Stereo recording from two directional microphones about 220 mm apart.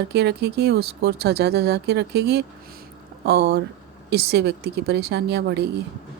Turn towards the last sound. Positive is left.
turn(degrees=-50)  # may be behind; listen again after turning